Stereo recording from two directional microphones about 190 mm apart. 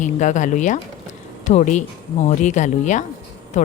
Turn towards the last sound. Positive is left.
turn(degrees=40)  # may be behind; listen again after turning